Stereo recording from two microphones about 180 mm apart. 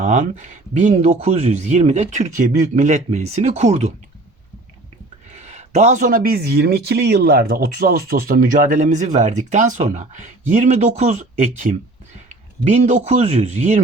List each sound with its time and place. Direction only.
0.0 s speech: 45° right (ahead or behind)
5.3 s speech: 40° right (ahead or behind)